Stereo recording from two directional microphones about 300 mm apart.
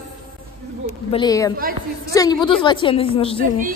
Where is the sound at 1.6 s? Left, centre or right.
Right.